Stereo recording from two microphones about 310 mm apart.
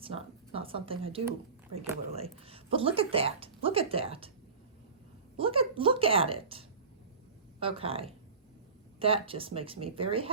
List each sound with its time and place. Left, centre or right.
0.0 s speech: centre
5.4 s speech: centre